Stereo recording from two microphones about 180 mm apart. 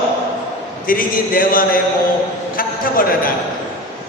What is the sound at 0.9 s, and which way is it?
Speech, 50° left (ahead or behind).